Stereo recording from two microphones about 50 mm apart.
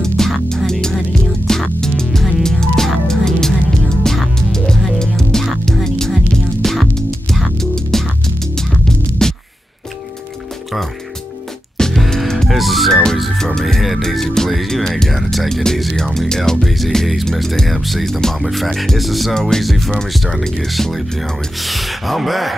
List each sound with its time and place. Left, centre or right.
0.5 s music: centre
11.7 s music: centre
12.4 s music: centre
19.3 s music: centre
19.6 s speech: centre